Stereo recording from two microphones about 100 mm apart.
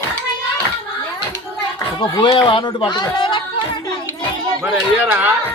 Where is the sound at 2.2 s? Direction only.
50° left (ahead or behind).